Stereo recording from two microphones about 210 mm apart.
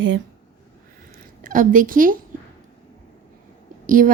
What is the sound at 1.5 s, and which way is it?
Speech, 40° right (ahead or behind).